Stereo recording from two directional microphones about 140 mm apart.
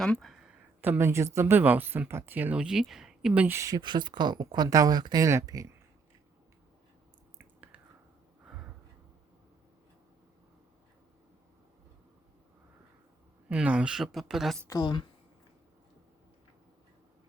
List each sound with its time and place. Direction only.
0.0 s speech: 5° left (ahead or behind)
0.8 s speech: 15° right (ahead or behind)
3.8 s speech: 35° right (ahead or behind)
7.3 s a sound: 10° right (ahead or behind)
13.5 s speech: 10° right (ahead or behind)
14.7 s speech: 30° left (ahead or behind)